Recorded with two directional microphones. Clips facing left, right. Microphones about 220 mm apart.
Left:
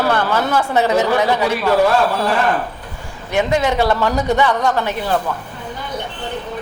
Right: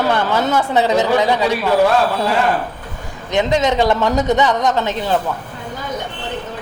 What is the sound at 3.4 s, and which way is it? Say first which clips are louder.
A man's voice: right 1 dB; 20° right (ahead or behind).